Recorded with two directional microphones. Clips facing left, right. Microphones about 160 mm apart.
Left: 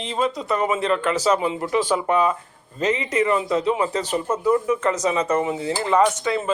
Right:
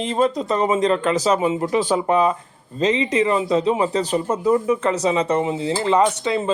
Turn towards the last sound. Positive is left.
turn(degrees=-20)  # may be behind; listen again after turning